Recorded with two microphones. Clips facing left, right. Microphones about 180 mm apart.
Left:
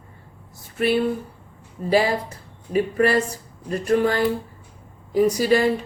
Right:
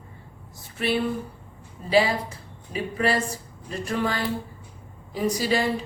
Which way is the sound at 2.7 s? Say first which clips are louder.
Left 6 dB; 50° left (ahead or behind).